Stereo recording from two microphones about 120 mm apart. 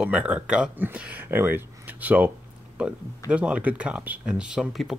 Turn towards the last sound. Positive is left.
turn(degrees=0)  # may be behind; listen again after turning